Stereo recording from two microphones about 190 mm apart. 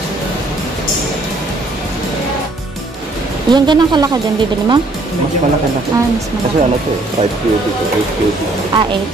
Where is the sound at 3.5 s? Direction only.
25° right (ahead or behind).